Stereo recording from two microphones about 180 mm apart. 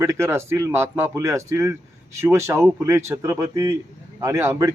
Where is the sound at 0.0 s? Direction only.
15° right (ahead or behind).